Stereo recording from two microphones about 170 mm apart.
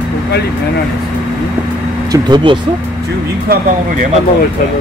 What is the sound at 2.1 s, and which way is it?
Speech, 25° right (ahead or behind).